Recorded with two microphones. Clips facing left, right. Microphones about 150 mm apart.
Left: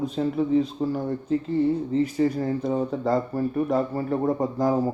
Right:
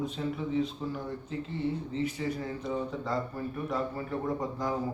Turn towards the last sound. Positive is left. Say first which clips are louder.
# left 9 dB
turn(degrees=40)  # may be behind; listen again after turning